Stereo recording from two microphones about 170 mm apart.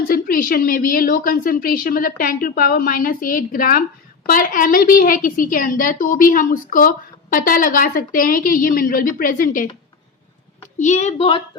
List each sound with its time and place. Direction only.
0.1 s a woman's voice: 55° left (ahead or behind)
10.8 s a woman's voice: 45° left (ahead or behind)